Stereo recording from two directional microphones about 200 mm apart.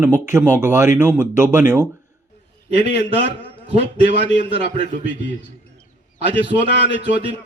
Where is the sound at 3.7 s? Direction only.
60° left (ahead or behind).